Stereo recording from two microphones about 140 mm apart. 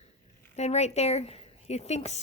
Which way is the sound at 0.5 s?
50° left (ahead or behind).